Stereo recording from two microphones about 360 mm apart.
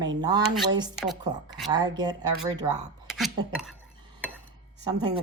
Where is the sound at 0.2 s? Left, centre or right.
Centre.